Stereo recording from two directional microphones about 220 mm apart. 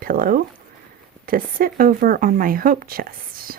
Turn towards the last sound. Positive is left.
turn(degrees=-40)  # may be behind; listen again after turning